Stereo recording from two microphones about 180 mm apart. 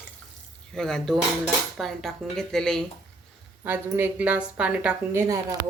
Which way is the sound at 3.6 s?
10° right (ahead or behind).